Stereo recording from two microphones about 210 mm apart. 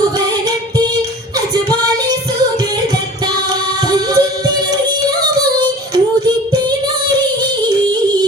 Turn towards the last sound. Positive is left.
turn(degrees=-20)  # may be behind; listen again after turning